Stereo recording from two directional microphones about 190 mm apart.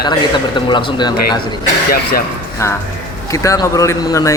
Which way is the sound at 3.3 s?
15° left (ahead or behind).